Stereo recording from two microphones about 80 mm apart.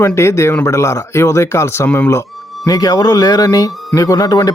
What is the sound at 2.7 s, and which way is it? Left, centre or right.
Speech, left.